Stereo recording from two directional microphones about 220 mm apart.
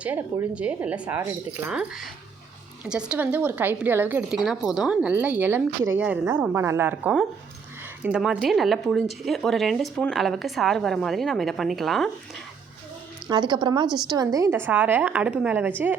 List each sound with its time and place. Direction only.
0.0 s a woman's voice: 5° right (ahead or behind)
13.2 s a woman's voice: 20° right (ahead or behind)